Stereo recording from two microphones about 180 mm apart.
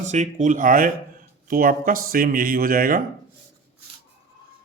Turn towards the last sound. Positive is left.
turn(degrees=-55)  # may be behind; listen again after turning